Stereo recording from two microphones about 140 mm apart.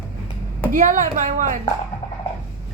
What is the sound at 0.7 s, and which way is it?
Speech, 75° right (ahead or behind).